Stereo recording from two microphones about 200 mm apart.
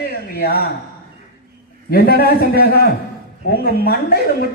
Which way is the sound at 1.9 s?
50° left (ahead or behind).